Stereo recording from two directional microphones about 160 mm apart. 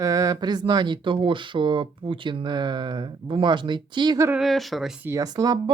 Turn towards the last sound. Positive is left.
turn(degrees=-25)  # may be behind; listen again after turning